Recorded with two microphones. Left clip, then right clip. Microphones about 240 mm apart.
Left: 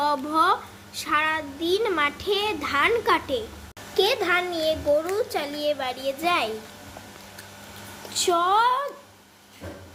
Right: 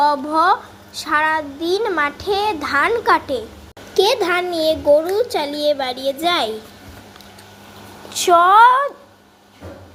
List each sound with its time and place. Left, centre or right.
0.0 s a child's voice: centre
8.1 s a woman's voice: centre